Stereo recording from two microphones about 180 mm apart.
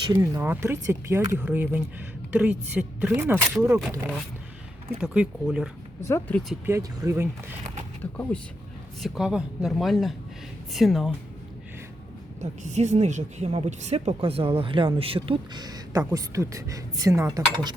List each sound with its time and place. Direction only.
0.0 s speech: 20° right (ahead or behind)
6.0 s speech: 15° left (ahead or behind)
6.7 s speech: 15° right (ahead or behind)
8.1 s speech: 10° left (ahead or behind)
12.4 s a woman's voice: 40° right (ahead or behind); by 17.7 s 20° right (ahead or behind)